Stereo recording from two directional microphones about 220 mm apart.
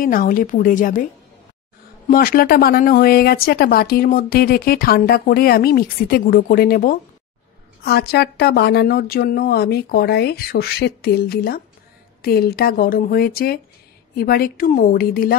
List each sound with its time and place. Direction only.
0.0 s a woman's voice: 40° left (ahead or behind)
2.0 s a woman's voice: 40° left (ahead or behind)